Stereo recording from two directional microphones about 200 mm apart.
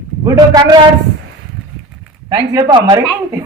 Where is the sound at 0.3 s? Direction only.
20° right (ahead or behind).